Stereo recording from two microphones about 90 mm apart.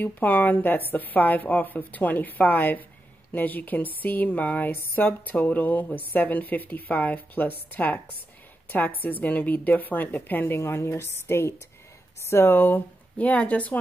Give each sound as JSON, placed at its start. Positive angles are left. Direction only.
{"t": 0.0, "sound": "a woman's voice", "side_deg": 20}